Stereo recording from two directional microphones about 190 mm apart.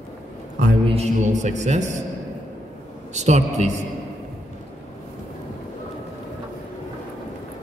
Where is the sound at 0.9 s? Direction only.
35° right (ahead or behind).